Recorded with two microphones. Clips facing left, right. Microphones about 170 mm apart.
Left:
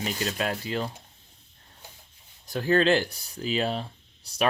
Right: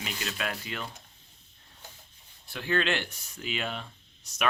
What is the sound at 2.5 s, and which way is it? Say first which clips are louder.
Speech: left 7 dB; 40° left (ahead or behind).